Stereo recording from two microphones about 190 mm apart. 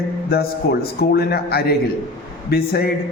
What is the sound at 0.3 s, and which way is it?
A man's voice, 55° left (ahead or behind).